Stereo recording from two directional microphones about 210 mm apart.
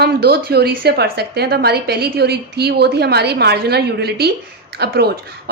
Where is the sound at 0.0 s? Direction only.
50° right (ahead or behind).